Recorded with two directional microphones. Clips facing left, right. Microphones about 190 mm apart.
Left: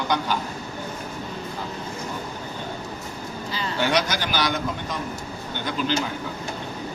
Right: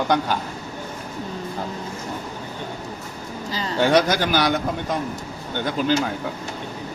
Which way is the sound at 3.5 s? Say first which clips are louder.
Right 3 dB; 35° right (ahead or behind).